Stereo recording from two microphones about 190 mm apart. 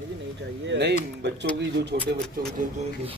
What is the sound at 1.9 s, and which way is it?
Speech, 55° right (ahead or behind).